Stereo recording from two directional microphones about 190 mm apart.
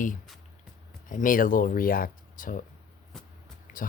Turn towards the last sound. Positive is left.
turn(degrees=45)  # may be behind; listen again after turning